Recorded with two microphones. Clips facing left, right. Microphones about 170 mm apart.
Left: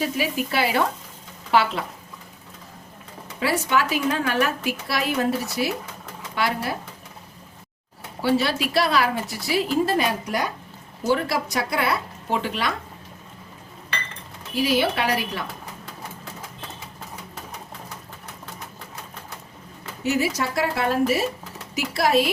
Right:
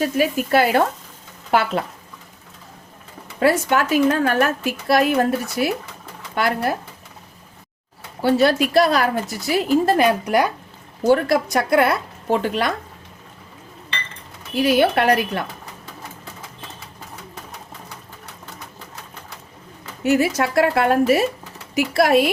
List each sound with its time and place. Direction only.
0.0 s a woman's voice: 50° right (ahead or behind)
3.4 s a woman's voice: 50° right (ahead or behind)
8.2 s a woman's voice: 50° right (ahead or behind)
14.6 s a woman's voice: 55° right (ahead or behind)
20.1 s a woman's voice: 55° right (ahead or behind)